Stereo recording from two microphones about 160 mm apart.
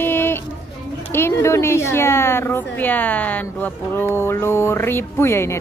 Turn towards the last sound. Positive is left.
turn(degrees=15)  # may be behind; listen again after turning